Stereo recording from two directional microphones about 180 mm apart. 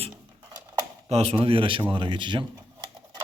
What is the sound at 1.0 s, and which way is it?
A man's voice, 35° right (ahead or behind).